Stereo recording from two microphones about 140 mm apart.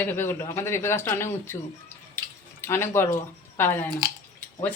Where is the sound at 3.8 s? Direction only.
25° right (ahead or behind).